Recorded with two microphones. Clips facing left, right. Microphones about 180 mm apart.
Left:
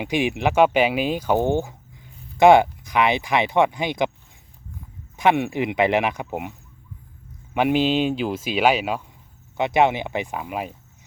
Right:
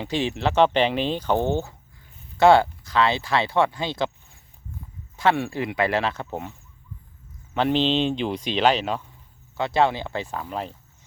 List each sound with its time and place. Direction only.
0.0 s speech: 15° left (ahead or behind)
5.1 s speech: 20° left (ahead or behind)
7.5 s speech: 10° left (ahead or behind)